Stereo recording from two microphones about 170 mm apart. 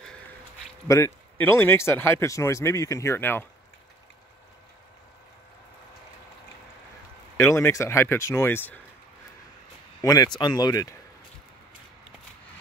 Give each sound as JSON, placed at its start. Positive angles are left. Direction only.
{"t": 0.8, "sound": "speech", "side_deg": 20}
{"t": 7.3, "sound": "speech", "side_deg": 15}
{"t": 10.0, "sound": "speech", "side_deg": 20}